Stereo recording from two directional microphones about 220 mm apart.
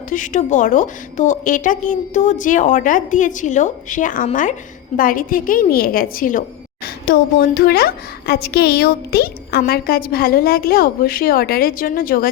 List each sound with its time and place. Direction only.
0.1 s a woman's voice: 35° left (ahead or behind)